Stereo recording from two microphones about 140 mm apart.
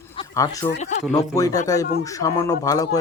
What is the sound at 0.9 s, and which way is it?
Speech, 55° left (ahead or behind).